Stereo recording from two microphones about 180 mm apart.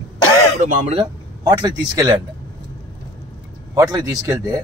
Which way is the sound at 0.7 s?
45° right (ahead or behind).